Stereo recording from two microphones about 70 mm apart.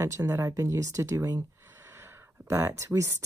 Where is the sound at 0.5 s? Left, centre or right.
Right.